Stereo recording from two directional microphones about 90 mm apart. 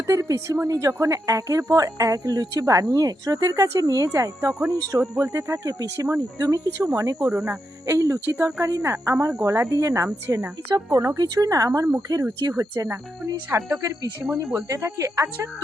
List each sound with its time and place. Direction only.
0.1 s speech: 35° right (ahead or behind)
4.1 s speech: 30° right (ahead or behind)
7.3 s speech: 20° right (ahead or behind)
7.9 s speech: 35° right (ahead or behind)